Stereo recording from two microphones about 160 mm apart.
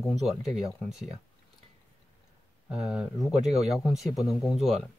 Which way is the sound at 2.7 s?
5° right (ahead or behind).